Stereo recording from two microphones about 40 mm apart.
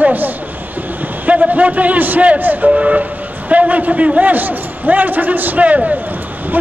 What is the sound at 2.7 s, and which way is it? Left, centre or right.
A man's voice, right.